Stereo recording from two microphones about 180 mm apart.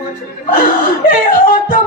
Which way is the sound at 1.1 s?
50° left (ahead or behind).